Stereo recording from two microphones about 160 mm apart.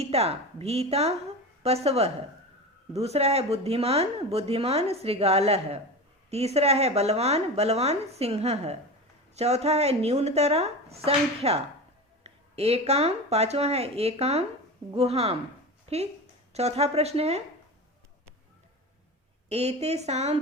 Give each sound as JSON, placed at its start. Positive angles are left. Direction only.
{"t": 0.0, "sound": "speech", "side_deg": -40}
{"t": 16.5, "sound": "speech", "side_deg": -40}
{"t": 19.5, "sound": "a woman's voice", "side_deg": -40}